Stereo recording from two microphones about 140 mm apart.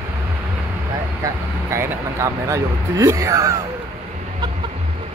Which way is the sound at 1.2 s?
20° right (ahead or behind).